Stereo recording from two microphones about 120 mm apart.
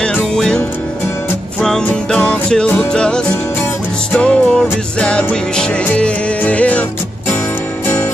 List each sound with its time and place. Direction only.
0.0 s music: 5° left (ahead or behind)
1.9 s music: 10° left (ahead or behind)
7.8 s music: 20° left (ahead or behind)